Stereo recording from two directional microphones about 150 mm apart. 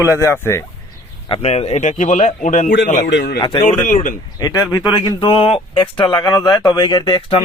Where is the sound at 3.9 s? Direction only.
55° left (ahead or behind).